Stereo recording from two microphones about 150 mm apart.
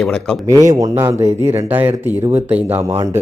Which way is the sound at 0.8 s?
20° right (ahead or behind).